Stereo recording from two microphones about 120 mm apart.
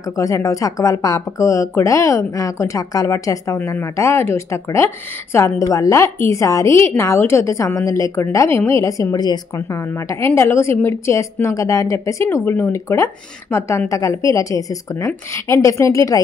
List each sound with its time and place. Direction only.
0.2 s speech: 25° left (ahead or behind)